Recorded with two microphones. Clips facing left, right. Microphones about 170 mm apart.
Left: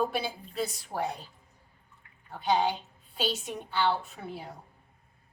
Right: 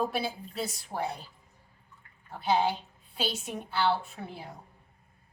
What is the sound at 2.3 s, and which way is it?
A woman's voice, centre (ahead or behind).